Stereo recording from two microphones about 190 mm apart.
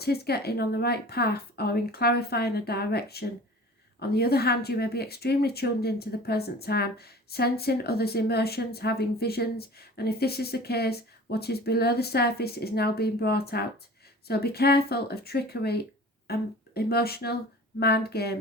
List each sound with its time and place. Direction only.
0.0 s speech: 55° left (ahead or behind)